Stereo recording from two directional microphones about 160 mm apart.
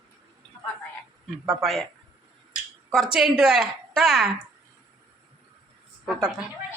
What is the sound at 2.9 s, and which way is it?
Speech, centre (ahead or behind).